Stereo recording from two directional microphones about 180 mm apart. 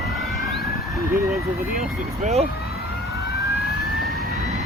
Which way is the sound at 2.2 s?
35° right (ahead or behind).